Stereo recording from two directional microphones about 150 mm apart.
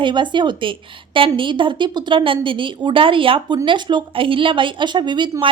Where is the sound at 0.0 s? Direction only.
30° right (ahead or behind).